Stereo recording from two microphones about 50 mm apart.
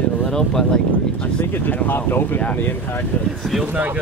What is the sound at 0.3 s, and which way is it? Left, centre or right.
Speech, centre.